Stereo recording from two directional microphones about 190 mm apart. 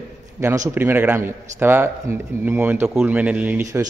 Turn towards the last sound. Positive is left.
turn(degrees=-15)  # may be behind; listen again after turning